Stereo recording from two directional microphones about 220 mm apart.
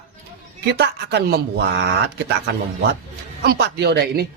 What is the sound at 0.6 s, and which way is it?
Speech, 50° right (ahead or behind).